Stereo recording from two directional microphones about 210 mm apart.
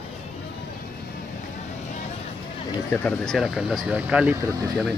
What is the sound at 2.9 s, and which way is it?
Speech, 5° left (ahead or behind).